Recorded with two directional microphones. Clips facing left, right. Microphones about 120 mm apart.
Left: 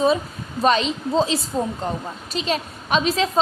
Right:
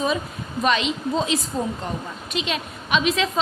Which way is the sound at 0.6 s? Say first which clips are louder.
Left 3 dB; 35° left (ahead or behind).